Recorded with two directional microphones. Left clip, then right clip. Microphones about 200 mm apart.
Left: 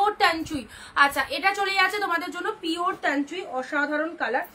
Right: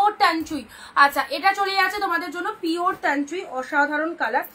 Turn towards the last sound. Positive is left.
turn(degrees=10)  # may be behind; listen again after turning